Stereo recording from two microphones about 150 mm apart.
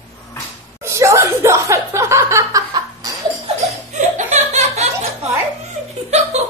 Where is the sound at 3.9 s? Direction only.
50° right (ahead or behind).